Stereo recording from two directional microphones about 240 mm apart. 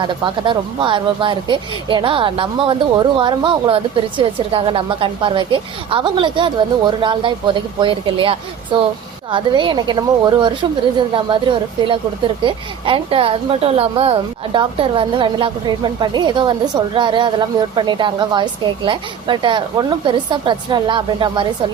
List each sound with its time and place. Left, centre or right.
0.0 s speech: centre